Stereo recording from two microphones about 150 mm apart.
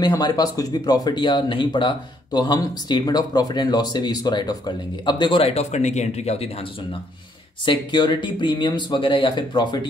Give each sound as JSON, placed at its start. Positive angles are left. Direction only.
{"t": 0.0, "sound": "speech", "side_deg": 25}